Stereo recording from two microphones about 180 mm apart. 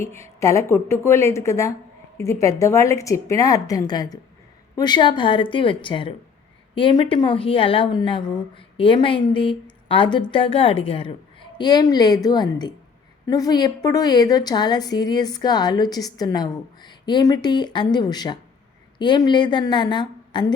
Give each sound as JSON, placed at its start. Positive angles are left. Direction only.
{"t": 0.0, "sound": "a woman's voice", "side_deg": 15}